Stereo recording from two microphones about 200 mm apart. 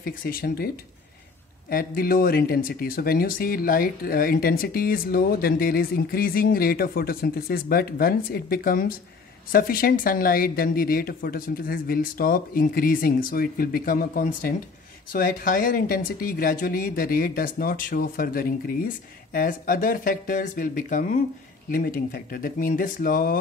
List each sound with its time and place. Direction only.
0.0 s speech: 45° left (ahead or behind)
1.7 s speech: 45° left (ahead or behind)